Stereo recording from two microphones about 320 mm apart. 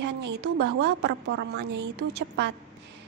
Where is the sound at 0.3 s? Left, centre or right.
Right.